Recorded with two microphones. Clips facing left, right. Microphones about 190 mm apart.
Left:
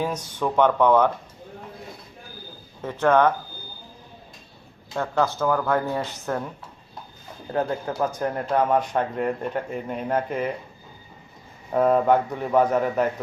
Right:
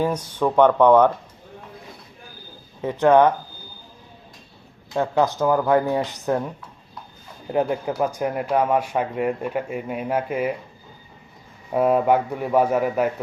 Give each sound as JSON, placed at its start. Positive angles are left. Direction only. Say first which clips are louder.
{"t": 0.1, "sound": "speech", "louder": "right 4 dB", "side_deg": -10}
{"t": 2.8, "sound": "speech", "louder": "right 4 dB", "side_deg": -15}
{"t": 4.9, "sound": "speech", "louder": "right 3 dB", "side_deg": -15}
{"t": 7.5, "sound": "speech", "louder": "right 3 dB", "side_deg": -15}
{"t": 11.7, "sound": "speech", "louder": "right 1 dB", "side_deg": -10}